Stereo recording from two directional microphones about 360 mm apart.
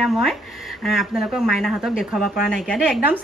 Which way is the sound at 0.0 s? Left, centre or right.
Centre.